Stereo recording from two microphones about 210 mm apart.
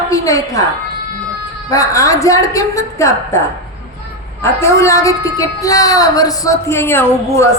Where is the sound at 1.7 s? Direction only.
15° left (ahead or behind).